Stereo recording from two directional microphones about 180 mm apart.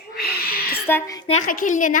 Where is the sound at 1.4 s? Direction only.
45° left (ahead or behind).